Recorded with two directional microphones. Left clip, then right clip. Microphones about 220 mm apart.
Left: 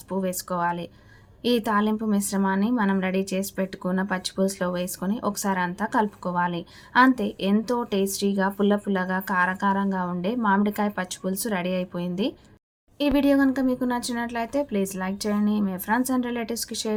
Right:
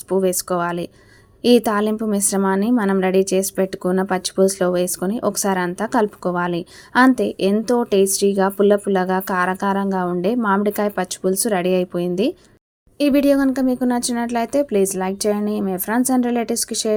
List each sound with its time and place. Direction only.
0.1 s a woman's voice: 30° right (ahead or behind)